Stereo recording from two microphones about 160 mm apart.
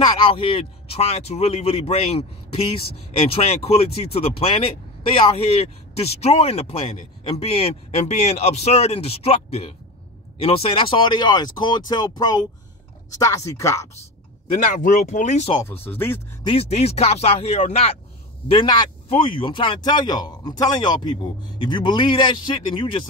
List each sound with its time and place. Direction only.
0.2 s a man's voice: 35° left (ahead or behind); by 13.8 s 20° left (ahead or behind)
14.6 s speech: 50° left (ahead or behind)
15.8 s speech: 15° left (ahead or behind)
16.4 s speech: 40° left (ahead or behind)
18.5 s a man's voice: 30° left (ahead or behind)